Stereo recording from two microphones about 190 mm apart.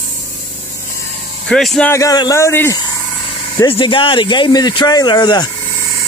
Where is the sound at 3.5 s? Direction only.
25° left (ahead or behind).